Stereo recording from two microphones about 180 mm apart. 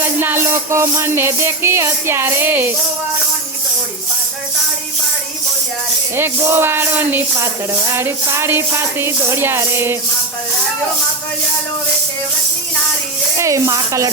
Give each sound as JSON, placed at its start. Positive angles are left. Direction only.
{"t": 0.0, "sound": "speech", "side_deg": -10}
{"t": 6.1, "sound": "speech", "side_deg": -15}
{"t": 13.3, "sound": "speech", "side_deg": -15}